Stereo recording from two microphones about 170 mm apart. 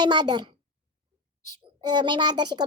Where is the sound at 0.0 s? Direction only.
25° right (ahead or behind).